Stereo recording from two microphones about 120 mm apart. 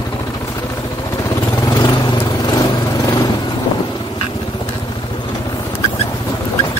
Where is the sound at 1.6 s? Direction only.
25° left (ahead or behind).